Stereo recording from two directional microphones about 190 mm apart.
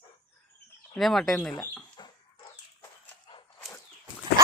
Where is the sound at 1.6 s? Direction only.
20° left (ahead or behind).